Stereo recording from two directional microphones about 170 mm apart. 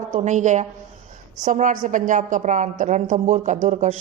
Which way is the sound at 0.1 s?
45° right (ahead or behind).